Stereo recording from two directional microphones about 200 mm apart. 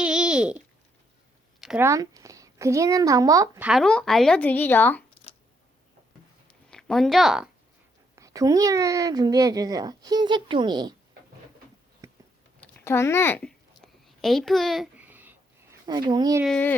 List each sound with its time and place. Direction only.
0.0 s a sound: 5° right (ahead or behind)
1.6 s a woman's voice: 10° right (ahead or behind)
3.6 s speech: centre (ahead or behind)
6.7 s speech: 5° left (ahead or behind)
8.1 s speech: 15° right (ahead or behind)
12.5 s a sound: 10° left (ahead or behind); by 15.4 s 10° right (ahead or behind)
15.9 s speech: 20° right (ahead or behind)
16.4 s speech: 5° left (ahead or behind)